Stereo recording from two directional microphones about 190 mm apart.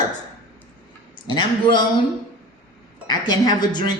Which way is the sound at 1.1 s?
25° left (ahead or behind).